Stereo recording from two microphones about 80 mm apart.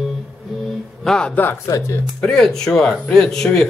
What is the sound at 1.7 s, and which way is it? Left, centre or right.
Speech, left.